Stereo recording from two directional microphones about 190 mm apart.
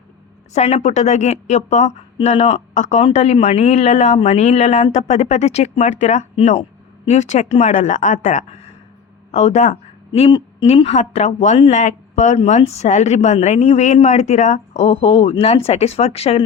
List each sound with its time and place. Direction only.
0.5 s a woman's voice: 35° left (ahead or behind)